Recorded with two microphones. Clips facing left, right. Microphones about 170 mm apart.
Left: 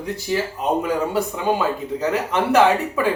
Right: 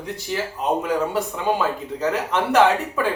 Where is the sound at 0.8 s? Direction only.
5° left (ahead or behind).